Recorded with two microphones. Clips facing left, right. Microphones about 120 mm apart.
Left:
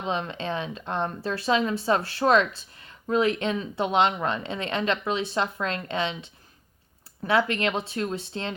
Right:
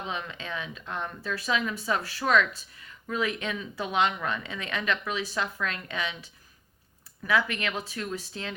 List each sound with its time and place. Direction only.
0.1 s speech: 30° left (ahead or behind)